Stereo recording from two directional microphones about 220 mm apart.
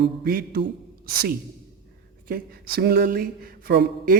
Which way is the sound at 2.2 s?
40° right (ahead or behind).